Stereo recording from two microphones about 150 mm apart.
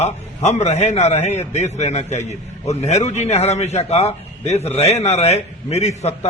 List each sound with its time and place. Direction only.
0.0 s a man's voice: 45° left (ahead or behind)